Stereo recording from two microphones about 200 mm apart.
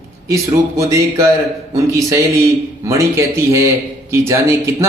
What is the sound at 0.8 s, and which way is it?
Speech, 15° right (ahead or behind).